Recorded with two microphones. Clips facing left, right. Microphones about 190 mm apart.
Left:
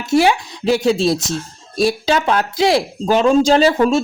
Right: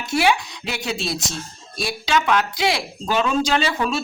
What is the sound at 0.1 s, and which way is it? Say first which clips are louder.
Speech: left 6 dB; 40° left (ahead or behind).